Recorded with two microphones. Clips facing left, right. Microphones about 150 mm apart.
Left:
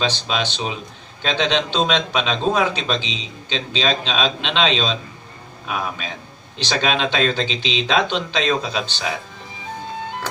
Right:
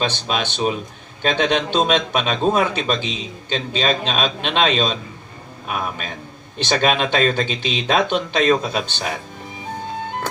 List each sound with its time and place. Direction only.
0.0 s a man's voice: 55° right (ahead or behind)
6.6 s a man's voice: 55° right (ahead or behind)